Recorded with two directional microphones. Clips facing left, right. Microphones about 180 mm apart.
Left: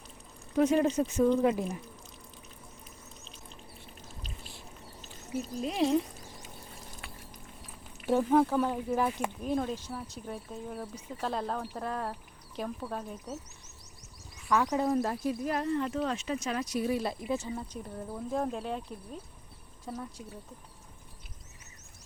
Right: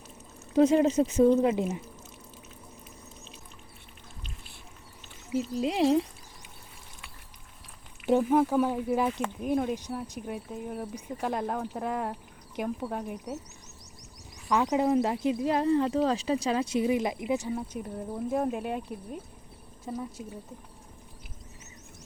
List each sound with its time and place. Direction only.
0.5 s speech: 25° right (ahead or behind)
5.5 s speech: 90° right
5.8 s speech: 30° right (ahead or behind)
8.0 s speech: 15° right (ahead or behind)
14.5 s speech: 15° right (ahead or behind)